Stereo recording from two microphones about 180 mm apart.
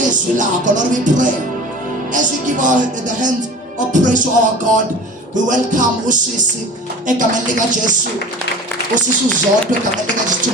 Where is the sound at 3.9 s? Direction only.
45° right (ahead or behind).